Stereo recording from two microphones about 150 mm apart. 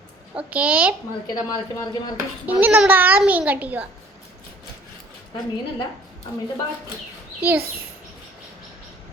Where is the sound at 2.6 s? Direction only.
10° right (ahead or behind).